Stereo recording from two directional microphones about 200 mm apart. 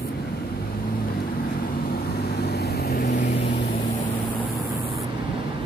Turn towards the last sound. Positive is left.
turn(degrees=60)  # may be behind; listen again after turning